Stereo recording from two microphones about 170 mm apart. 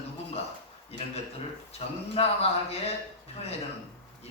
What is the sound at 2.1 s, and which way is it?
Speech, 35° left (ahead or behind).